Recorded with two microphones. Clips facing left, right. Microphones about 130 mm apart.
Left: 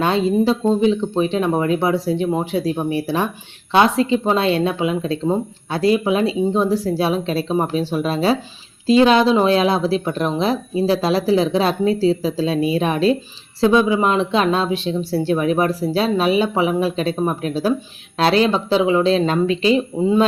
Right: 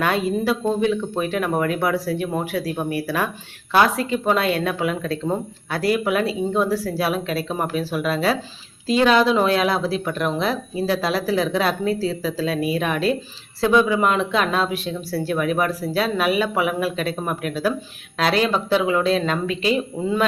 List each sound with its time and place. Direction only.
0.0 s speech: 25° left (ahead or behind)